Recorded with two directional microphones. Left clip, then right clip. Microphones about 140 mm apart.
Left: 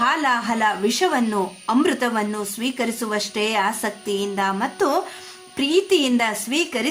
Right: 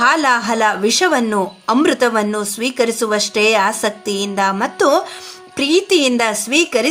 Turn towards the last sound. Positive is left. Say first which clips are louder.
# right 8 dB
turn(degrees=-35)  # may be behind; listen again after turning